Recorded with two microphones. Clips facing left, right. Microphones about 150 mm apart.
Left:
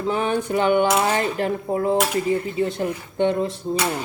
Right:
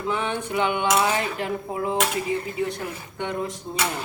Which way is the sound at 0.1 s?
40° left (ahead or behind).